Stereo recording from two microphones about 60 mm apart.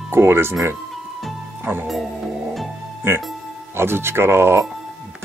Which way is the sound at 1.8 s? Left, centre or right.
Centre.